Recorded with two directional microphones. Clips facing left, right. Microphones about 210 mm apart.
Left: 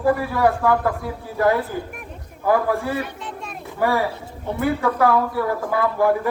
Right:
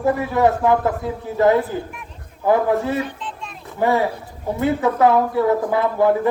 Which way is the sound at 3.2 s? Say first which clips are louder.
Left 1 dB; 50° left (ahead or behind).